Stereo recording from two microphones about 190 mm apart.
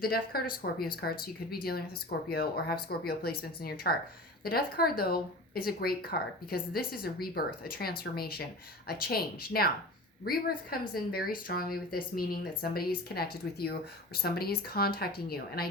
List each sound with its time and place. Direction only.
0.0 s speech: 50° left (ahead or behind)